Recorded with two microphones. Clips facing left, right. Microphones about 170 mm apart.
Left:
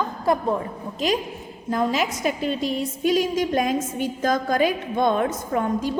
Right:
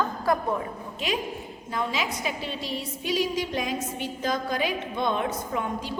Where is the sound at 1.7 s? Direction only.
45° left (ahead or behind).